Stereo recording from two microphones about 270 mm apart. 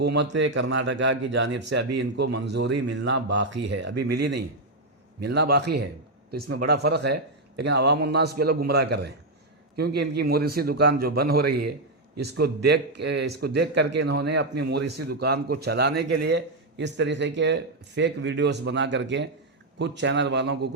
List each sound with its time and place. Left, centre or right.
0.0 s a man's voice: right